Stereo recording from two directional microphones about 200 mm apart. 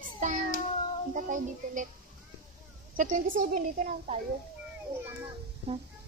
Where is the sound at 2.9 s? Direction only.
40° right (ahead or behind).